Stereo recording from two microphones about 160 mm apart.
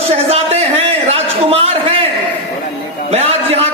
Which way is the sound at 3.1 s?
40° right (ahead or behind).